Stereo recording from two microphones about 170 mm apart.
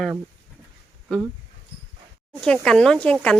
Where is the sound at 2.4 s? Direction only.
5° left (ahead or behind).